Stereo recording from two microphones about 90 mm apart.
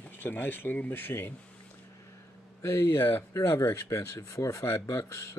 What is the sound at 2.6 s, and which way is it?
Speech, 30° left (ahead or behind).